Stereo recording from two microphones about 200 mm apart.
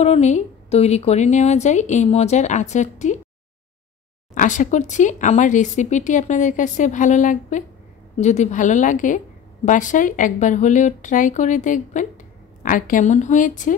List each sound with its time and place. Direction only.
0.0 s speech: 35° left (ahead or behind)
4.4 s speech: 40° left (ahead or behind)